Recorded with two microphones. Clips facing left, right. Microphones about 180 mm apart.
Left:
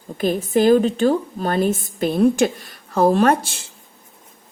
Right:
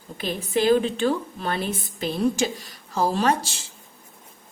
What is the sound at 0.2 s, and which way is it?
A woman's voice, 45° left (ahead or behind).